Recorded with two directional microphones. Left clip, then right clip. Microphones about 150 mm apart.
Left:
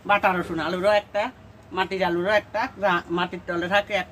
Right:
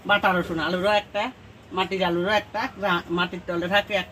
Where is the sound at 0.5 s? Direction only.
Centre (ahead or behind).